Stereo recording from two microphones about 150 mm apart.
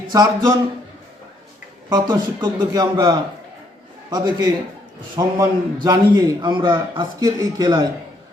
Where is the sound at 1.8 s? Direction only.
25° right (ahead or behind).